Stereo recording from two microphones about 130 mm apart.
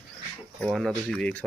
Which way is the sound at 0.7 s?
5° left (ahead or behind).